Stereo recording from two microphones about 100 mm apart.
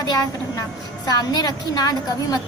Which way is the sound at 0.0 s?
40° left (ahead or behind).